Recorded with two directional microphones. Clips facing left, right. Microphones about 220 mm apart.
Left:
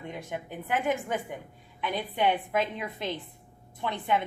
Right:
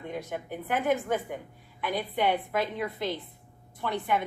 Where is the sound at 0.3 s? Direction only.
15° left (ahead or behind).